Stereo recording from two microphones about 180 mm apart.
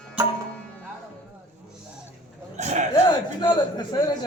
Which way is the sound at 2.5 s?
40° right (ahead or behind).